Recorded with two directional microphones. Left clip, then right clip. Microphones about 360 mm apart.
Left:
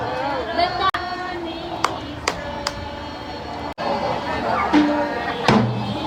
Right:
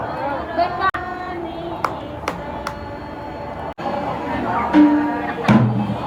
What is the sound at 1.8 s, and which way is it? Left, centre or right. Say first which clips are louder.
Music: left 2 dB; left.